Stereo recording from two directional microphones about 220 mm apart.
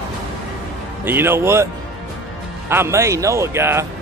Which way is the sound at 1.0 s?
10° right (ahead or behind).